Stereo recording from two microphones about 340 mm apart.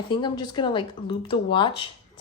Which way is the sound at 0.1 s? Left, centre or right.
Centre.